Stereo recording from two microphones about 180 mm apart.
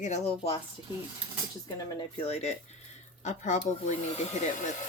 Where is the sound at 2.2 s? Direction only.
35° left (ahead or behind).